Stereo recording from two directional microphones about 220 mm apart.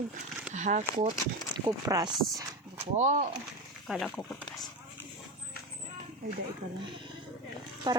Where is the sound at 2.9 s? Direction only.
35° right (ahead or behind).